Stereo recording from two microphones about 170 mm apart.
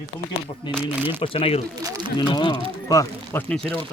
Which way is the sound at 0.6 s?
25° left (ahead or behind).